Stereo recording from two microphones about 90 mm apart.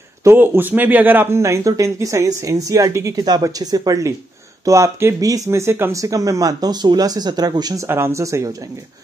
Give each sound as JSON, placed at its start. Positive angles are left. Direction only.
{"t": 0.2, "sound": "speech", "side_deg": -25}
{"t": 7.8, "sound": "speech", "side_deg": -30}